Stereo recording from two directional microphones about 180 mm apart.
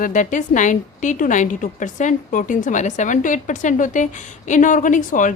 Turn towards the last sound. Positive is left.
turn(degrees=45)  # may be behind; listen again after turning